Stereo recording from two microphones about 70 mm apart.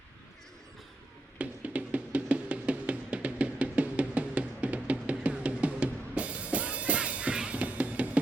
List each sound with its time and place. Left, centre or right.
1.4 s music: centre